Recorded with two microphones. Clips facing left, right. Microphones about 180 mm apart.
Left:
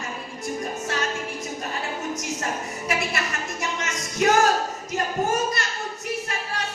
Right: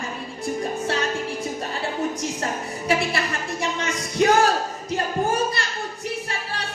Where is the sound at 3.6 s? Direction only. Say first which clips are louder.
Right 4 dB; 30° right (ahead or behind).